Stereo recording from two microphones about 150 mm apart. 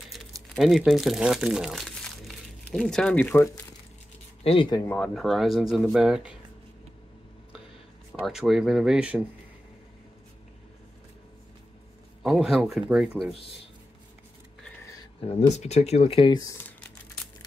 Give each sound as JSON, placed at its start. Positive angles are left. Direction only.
{"t": 0.6, "sound": "speech", "side_deg": 0}
{"t": 4.4, "sound": "speech", "side_deg": 40}
{"t": 4.8, "sound": "speech", "side_deg": 10}
{"t": 8.1, "sound": "speech", "side_deg": -5}
{"t": 12.2, "sound": "speech", "side_deg": 0}
{"t": 15.1, "sound": "speech", "side_deg": 45}